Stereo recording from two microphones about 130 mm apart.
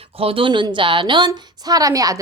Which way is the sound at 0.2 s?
45° right (ahead or behind).